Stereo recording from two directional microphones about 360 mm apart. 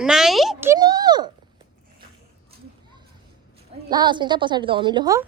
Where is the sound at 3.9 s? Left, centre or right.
Centre.